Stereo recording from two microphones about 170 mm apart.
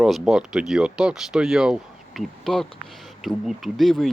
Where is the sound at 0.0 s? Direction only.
5° right (ahead or behind).